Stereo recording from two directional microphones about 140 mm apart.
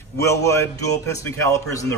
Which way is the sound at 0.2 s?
20° left (ahead or behind).